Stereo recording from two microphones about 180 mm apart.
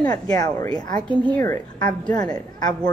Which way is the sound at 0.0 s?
20° left (ahead or behind).